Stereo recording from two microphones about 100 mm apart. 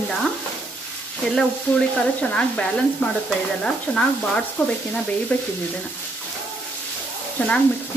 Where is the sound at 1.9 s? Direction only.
10° left (ahead or behind).